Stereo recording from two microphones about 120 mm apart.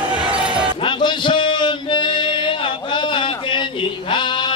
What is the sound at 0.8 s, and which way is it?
Male singing, 40° left (ahead or behind).